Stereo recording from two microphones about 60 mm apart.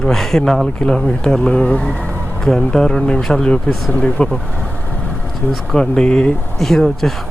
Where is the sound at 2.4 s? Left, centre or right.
Centre.